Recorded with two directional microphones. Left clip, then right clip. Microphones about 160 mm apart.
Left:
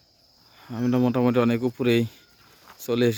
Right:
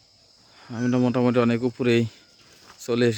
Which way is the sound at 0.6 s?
15° left (ahead or behind).